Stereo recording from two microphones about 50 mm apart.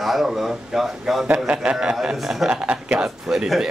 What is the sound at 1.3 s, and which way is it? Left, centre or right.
Speech, centre.